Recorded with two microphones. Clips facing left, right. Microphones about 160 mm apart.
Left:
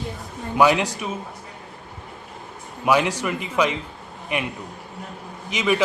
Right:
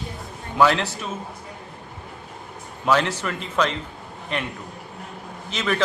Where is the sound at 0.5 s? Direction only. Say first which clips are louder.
Left 1 dB; 15° left (ahead or behind).